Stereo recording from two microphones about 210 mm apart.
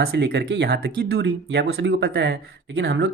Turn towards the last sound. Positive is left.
turn(degrees=-55)  # may be behind; listen again after turning